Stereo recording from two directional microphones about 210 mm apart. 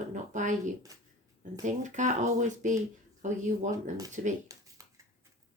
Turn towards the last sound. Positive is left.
turn(degrees=-40)  # may be behind; listen again after turning